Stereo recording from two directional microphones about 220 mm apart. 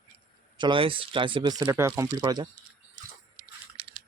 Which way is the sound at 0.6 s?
25° right (ahead or behind).